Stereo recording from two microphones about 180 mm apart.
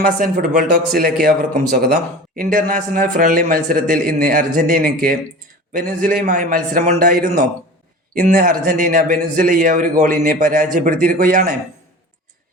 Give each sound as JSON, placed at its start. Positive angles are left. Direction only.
{"t": 0.2, "sound": "a man's voice", "side_deg": -55}